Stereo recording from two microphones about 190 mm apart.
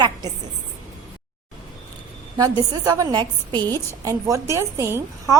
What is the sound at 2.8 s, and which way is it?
A woman's voice, 20° right (ahead or behind).